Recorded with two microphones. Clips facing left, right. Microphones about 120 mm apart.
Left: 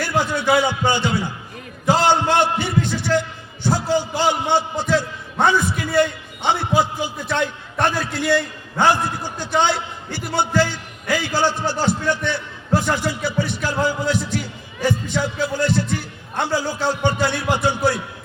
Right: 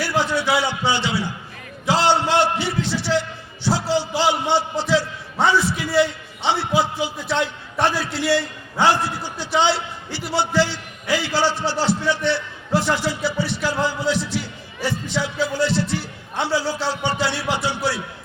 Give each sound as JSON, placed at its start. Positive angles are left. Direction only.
{"t": 0.2, "sound": "a man's voice", "side_deg": 50}
{"t": 1.9, "sound": "a sound", "side_deg": 50}
{"t": 7.9, "sound": "a man's voice", "side_deg": 50}